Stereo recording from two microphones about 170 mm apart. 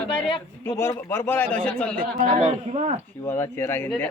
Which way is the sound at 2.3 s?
45° right (ahead or behind).